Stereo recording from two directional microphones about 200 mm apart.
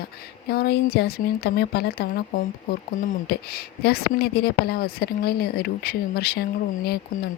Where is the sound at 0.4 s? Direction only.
50° left (ahead or behind).